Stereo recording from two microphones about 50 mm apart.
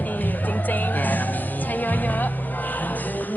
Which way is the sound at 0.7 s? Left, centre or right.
Left.